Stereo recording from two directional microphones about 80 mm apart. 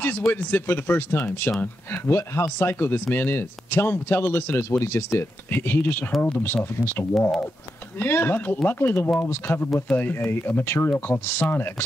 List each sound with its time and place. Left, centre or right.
0.3 s speech: left